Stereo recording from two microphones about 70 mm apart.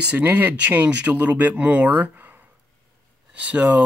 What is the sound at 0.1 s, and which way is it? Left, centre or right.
Speech, right.